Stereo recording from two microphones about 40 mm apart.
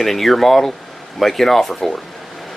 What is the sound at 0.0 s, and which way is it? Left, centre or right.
Speech, centre.